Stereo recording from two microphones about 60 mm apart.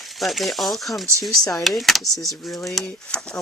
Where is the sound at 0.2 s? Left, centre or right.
Centre.